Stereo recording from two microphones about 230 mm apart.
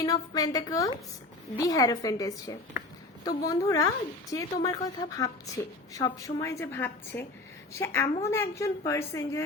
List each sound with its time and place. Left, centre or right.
0.0 s a woman's voice: centre